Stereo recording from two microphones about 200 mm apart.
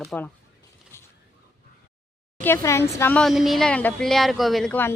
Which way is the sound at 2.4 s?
10° left (ahead or behind).